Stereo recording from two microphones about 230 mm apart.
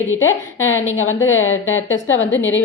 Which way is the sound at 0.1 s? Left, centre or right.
Left.